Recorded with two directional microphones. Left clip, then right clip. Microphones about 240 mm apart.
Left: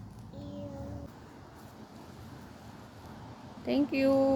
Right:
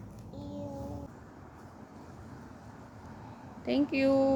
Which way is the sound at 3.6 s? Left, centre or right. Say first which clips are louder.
Even; centre.